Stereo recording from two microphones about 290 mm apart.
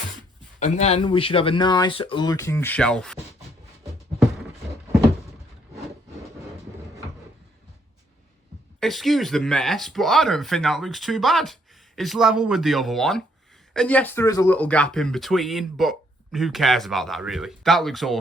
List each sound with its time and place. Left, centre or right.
0.6 s speech: left; by 3.2 s centre
8.8 s speech: centre